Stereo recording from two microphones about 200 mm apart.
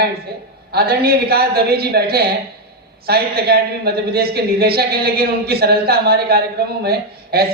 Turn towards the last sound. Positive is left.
turn(degrees=-50)  # may be behind; listen again after turning